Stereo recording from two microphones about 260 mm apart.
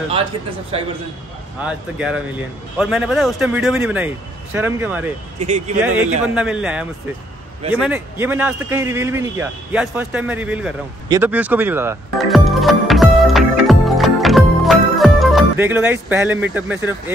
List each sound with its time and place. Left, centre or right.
0.7 s speech: right
1.6 s a man's voice: centre
5.4 s speech: right
6.2 s a man's voice: centre
11.1 s music: centre